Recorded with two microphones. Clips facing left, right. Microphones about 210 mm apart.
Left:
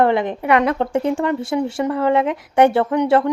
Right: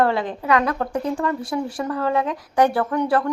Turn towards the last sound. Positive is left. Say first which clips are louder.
# left 4 dB
turn(degrees=20)  # may be behind; listen again after turning